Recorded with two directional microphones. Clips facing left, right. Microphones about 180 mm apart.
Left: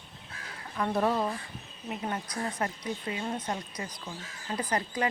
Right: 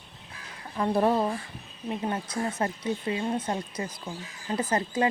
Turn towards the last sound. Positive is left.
turn(degrees=-25)  # may be behind; listen again after turning